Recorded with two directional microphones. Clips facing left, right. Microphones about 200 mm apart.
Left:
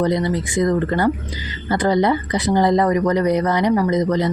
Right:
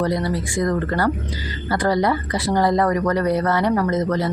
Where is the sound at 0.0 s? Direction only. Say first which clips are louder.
Left 3 dB; 20° left (ahead or behind).